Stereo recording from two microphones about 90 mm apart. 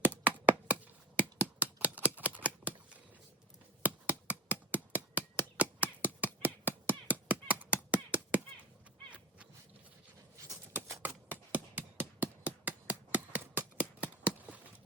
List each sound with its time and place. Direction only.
0.0 s finger snapping: 20° right (ahead or behind)
3.8 s finger snapping: 15° right (ahead or behind)
11.0 s a sound: 20° right (ahead or behind)